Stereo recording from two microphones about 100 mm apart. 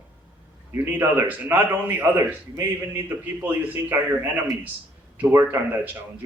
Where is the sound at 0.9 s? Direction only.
20° right (ahead or behind).